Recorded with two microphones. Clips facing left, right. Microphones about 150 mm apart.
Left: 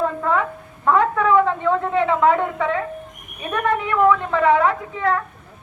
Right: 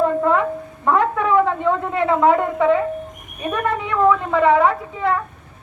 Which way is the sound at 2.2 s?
10° right (ahead or behind).